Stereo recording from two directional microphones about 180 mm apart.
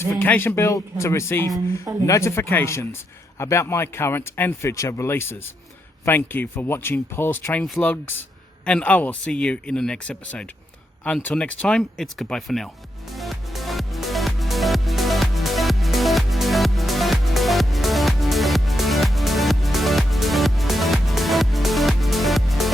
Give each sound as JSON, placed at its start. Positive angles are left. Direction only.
{"t": 0.0, "sound": "speech", "side_deg": 10}
{"t": 1.5, "sound": "speech", "side_deg": -20}
{"t": 2.0, "sound": "speech", "side_deg": 15}
{"t": 13.1, "sound": "music", "side_deg": 0}